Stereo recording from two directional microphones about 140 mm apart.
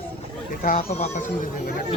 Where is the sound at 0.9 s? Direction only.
60° left (ahead or behind).